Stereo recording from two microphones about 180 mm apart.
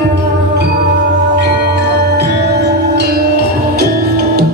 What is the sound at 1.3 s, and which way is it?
Music, 70° right (ahead or behind).